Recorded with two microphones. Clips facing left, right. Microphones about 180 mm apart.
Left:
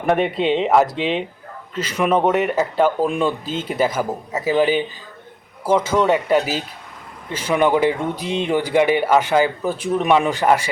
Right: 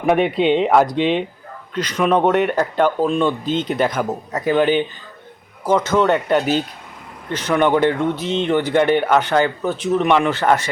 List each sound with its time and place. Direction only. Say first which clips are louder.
0.0 s speech: right 2 dB; centre (ahead or behind)